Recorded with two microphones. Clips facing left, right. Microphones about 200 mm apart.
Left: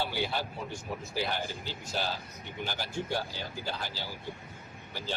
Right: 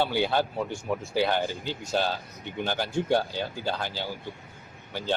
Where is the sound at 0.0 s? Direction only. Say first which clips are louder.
Right 8 dB; 65° right (ahead or behind).